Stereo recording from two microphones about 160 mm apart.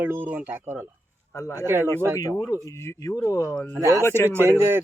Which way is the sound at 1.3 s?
15° left (ahead or behind).